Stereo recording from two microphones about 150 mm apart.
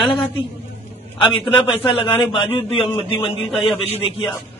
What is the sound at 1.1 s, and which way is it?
Speech, 35° left (ahead or behind).